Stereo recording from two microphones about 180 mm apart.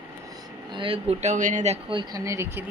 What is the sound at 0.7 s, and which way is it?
Speech, 30° right (ahead or behind).